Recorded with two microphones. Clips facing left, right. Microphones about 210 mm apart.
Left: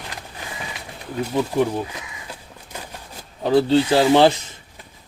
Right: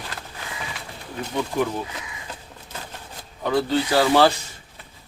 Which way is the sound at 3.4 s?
30° left (ahead or behind).